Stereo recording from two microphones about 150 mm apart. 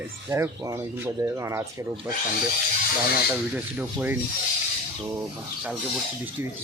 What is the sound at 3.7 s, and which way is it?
Speech, 10° right (ahead or behind).